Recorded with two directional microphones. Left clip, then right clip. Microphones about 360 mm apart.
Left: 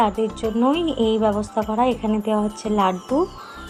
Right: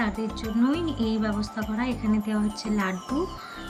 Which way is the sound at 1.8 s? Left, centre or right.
Left.